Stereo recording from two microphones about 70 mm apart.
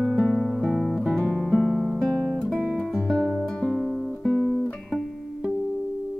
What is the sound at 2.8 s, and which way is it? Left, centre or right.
Music, centre.